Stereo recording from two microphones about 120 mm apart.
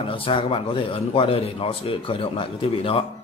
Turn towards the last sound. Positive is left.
turn(degrees=50)  # may be behind; listen again after turning